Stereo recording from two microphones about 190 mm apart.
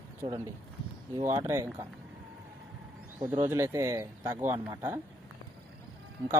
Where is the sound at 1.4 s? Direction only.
15° right (ahead or behind).